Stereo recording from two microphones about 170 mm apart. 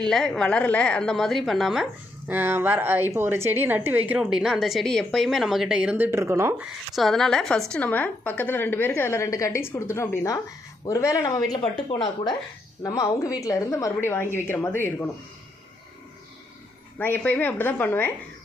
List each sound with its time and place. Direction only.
0.0 s a woman's voice: 5° left (ahead or behind); by 6.7 s 15° right (ahead or behind)
6.9 s a woman's voice: centre (ahead or behind)
17.0 s a woman's voice: 10° left (ahead or behind)